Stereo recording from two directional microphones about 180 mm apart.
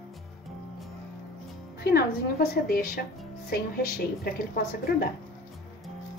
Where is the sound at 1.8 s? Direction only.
60° left (ahead or behind).